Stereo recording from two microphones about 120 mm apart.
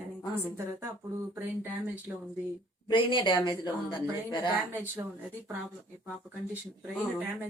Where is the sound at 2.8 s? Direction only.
40° left (ahead or behind).